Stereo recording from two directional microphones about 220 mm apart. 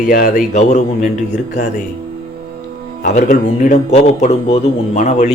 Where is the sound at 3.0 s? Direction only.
35° left (ahead or behind).